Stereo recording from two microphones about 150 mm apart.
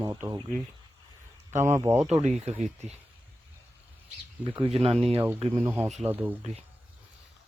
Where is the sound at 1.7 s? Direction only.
20° right (ahead or behind).